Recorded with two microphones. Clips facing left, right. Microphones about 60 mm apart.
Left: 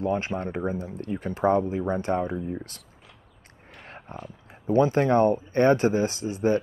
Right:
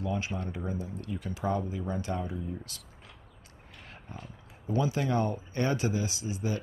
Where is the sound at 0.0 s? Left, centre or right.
Left.